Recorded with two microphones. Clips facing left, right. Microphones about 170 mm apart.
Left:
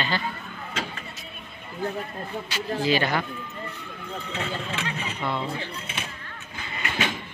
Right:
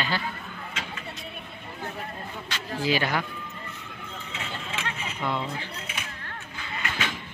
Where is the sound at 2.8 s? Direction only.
10° right (ahead or behind).